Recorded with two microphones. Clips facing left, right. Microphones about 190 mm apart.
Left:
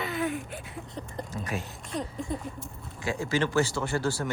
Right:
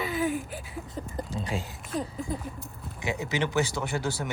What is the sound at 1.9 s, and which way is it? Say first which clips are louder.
Speech: right 1 dB; centre (ahead or behind).